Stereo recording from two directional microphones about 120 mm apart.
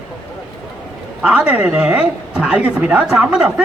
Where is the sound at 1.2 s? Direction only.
10° right (ahead or behind).